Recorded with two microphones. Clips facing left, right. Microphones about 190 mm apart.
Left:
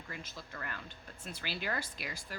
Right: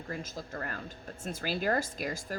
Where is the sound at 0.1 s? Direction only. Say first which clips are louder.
Right 9 dB; 45° right (ahead or behind).